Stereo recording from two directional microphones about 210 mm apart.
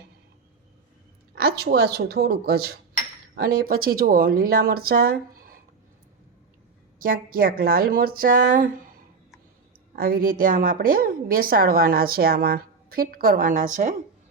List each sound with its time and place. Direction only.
1.4 s a woman's voice: 50° right (ahead or behind)
7.0 s a woman's voice: 45° right (ahead or behind)
9.9 s a woman's voice: 45° right (ahead or behind)